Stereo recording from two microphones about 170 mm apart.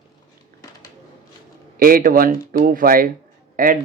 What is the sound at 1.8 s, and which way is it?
Speech, 55° right (ahead or behind).